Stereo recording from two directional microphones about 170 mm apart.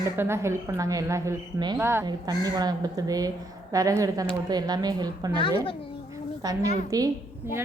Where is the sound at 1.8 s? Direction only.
15° right (ahead or behind).